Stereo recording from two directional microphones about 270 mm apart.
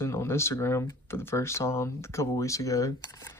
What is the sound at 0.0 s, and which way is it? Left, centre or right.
Speech, centre.